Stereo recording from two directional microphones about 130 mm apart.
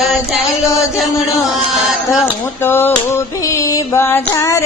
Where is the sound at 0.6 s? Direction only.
25° left (ahead or behind).